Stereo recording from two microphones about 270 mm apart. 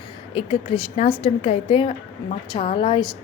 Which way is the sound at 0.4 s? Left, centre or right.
Centre.